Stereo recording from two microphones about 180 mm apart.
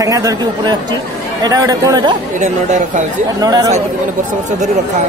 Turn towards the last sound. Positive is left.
turn(degrees=-20)  # may be behind; listen again after turning